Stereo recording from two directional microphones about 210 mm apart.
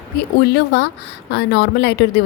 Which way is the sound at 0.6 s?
50° left (ahead or behind).